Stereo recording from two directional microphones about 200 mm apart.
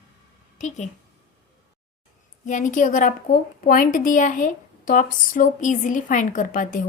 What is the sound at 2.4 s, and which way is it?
A woman's voice, 40° left (ahead or behind).